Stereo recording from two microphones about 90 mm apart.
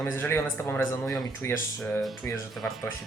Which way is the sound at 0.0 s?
25° left (ahead or behind).